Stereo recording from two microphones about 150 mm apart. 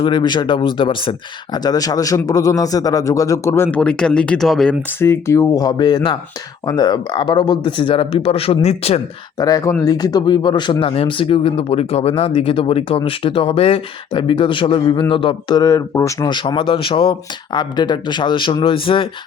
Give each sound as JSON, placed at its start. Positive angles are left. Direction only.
{"t": 0.0, "sound": "speech", "side_deg": 30}
{"t": 1.5, "sound": "a man's voice", "side_deg": 25}
{"t": 4.9, "sound": "a man's voice", "side_deg": 15}
{"t": 9.4, "sound": "a man's voice", "side_deg": 25}
{"t": 16.3, "sound": "speech", "side_deg": 35}